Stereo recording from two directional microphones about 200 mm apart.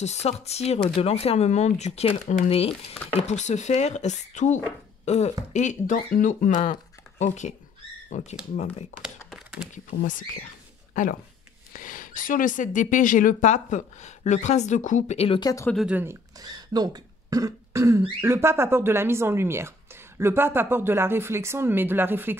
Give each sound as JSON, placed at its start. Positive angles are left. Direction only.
{"t": 0.0, "sound": "speech", "side_deg": 35}
{"t": 9.3, "sound": "a sound", "side_deg": -5}
{"t": 9.8, "sound": "speech", "side_deg": 40}
{"t": 15.7, "sound": "speech", "side_deg": -5}